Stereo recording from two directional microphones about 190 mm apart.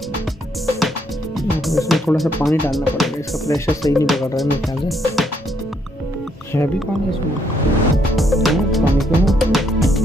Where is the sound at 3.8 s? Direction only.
15° left (ahead or behind).